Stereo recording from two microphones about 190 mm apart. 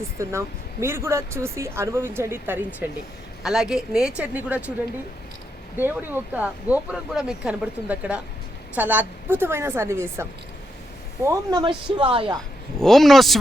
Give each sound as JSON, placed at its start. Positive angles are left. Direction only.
{"t": 0.2, "sound": "speech", "side_deg": -15}
{"t": 5.7, "sound": "speech", "side_deg": -10}
{"t": 11.6, "sound": "speech", "side_deg": -25}
{"t": 12.8, "sound": "speech", "side_deg": 0}